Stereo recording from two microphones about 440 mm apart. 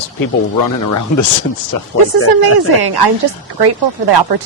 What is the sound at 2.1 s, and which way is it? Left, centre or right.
Speech, right.